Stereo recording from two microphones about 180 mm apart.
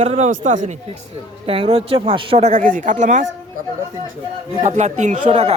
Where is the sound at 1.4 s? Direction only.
30° right (ahead or behind).